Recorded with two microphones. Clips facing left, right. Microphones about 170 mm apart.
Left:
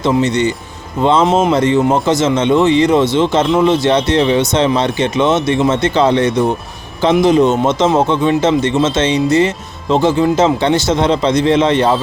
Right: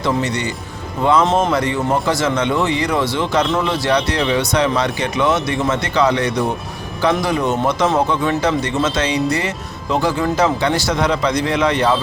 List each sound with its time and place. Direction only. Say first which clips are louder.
0.0 s speech: left 6 dB; 25° left (ahead or behind)